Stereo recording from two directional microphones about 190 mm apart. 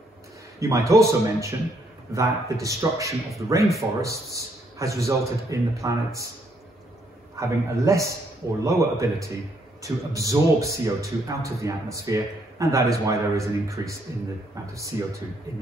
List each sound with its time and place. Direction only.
0.6 s speech: 15° right (ahead or behind)
7.3 s speech: 15° right (ahead or behind)